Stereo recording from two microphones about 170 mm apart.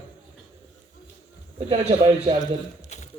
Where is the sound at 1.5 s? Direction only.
35° right (ahead or behind).